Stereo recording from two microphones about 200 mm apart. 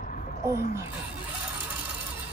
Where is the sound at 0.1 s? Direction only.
40° left (ahead or behind).